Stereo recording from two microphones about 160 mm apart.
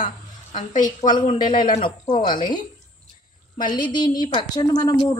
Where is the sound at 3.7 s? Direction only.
25° left (ahead or behind).